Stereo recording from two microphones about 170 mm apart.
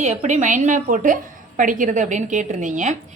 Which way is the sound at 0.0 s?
45° right (ahead or behind).